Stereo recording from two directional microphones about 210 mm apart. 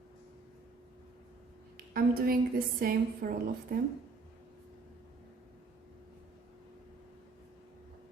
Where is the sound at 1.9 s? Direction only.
45° right (ahead or behind).